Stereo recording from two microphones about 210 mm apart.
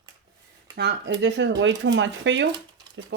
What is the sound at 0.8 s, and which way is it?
Speech, 55° right (ahead or behind).